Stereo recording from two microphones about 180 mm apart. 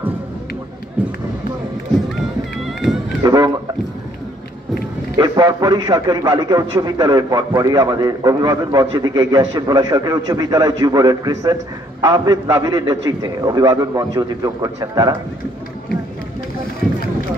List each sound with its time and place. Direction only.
1.0 s speech: 5° right (ahead or behind)
3.2 s a sound: 20° right (ahead or behind)
5.1 s a man's voice: 20° right (ahead or behind)